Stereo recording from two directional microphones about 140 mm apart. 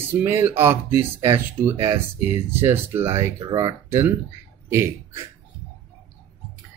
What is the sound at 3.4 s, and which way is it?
Speech, 35° right (ahead or behind).